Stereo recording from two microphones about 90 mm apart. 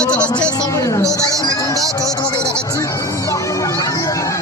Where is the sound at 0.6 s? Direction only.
40° left (ahead or behind).